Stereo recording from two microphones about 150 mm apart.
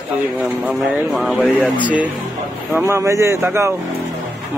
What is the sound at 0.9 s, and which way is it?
Speech, 5° right (ahead or behind).